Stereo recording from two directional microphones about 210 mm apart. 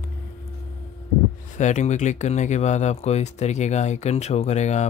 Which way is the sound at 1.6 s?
35° left (ahead or behind).